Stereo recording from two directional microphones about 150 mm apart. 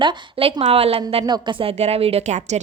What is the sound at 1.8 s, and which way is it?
Speech, 40° right (ahead or behind).